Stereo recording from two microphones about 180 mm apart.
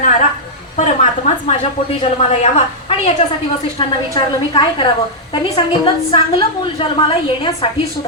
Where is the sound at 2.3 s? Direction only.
40° left (ahead or behind).